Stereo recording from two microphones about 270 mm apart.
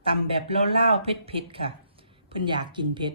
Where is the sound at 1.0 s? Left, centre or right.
Centre.